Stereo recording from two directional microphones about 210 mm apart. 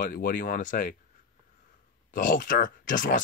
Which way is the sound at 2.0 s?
40° left (ahead or behind).